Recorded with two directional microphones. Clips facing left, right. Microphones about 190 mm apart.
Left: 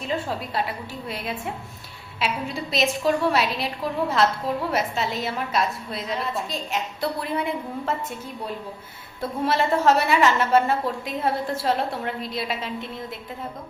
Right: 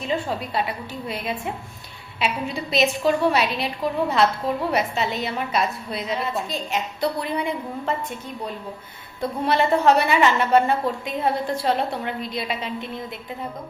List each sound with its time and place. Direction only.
0.0 s a woman's voice: centre (ahead or behind)
9.2 s a woman's voice: centre (ahead or behind)